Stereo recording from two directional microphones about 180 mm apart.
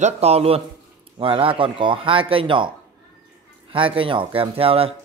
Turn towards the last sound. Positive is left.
turn(degrees=-30)  # may be behind; listen again after turning